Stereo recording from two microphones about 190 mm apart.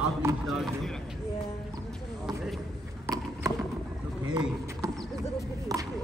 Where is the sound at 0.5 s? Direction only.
Centre (ahead or behind).